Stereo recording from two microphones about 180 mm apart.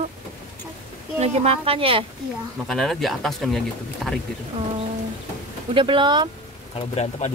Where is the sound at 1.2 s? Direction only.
35° right (ahead or behind).